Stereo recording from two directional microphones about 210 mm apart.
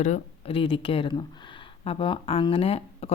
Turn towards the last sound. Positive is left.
turn(degrees=30)  # may be behind; listen again after turning